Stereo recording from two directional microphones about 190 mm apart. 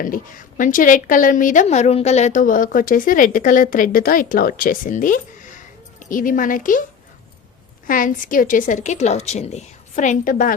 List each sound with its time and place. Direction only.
0.0 s a woman's voice: 45° left (ahead or behind)
7.9 s a woman's voice: 45° left (ahead or behind)